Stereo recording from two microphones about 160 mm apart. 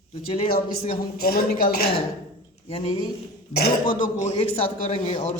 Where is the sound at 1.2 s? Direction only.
70° left (ahead or behind).